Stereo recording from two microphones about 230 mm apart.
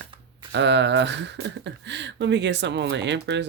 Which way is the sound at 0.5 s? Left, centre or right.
Right.